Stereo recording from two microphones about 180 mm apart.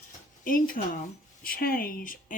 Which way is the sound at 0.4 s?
50° left (ahead or behind).